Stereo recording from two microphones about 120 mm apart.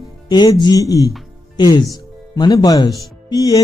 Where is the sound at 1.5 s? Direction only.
35° left (ahead or behind).